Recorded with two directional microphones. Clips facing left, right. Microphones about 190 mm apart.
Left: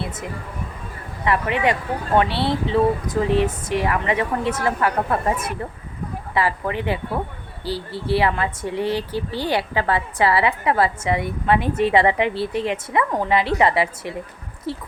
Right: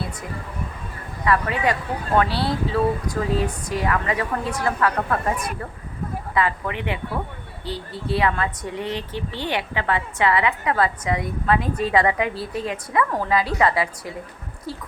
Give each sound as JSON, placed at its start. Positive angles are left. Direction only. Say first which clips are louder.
{"t": 1.2, "sound": "speech", "louder": "left 1 dB", "side_deg": 25}